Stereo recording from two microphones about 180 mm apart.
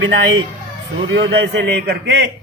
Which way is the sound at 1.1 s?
75° right (ahead or behind).